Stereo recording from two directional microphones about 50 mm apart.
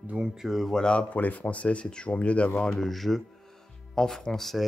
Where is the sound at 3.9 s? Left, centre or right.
Centre.